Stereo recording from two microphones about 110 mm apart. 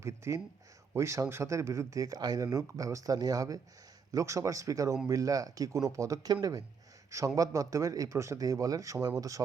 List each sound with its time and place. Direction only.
0.0 s speech: 25° right (ahead or behind)